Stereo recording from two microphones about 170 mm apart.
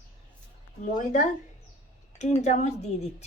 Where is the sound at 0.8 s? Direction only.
45° left (ahead or behind).